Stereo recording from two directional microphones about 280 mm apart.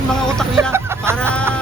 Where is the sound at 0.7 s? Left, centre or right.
Centre.